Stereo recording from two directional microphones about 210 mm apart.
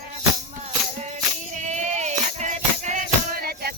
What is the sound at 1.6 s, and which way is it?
Music, 35° right (ahead or behind).